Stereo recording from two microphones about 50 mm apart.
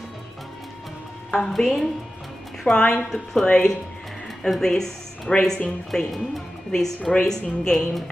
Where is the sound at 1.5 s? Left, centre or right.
Centre.